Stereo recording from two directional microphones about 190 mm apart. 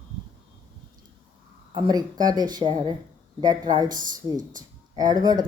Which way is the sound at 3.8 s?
45° right (ahead or behind).